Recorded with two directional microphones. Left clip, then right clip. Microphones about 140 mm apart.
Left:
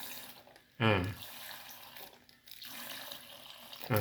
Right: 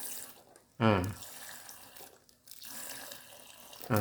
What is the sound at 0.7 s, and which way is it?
Speech, 40° right (ahead or behind).